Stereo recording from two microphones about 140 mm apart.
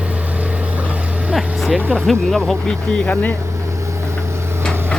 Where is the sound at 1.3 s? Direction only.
Centre (ahead or behind).